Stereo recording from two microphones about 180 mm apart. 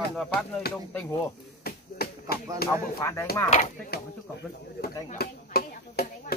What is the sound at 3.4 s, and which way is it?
Speech, 40° left (ahead or behind).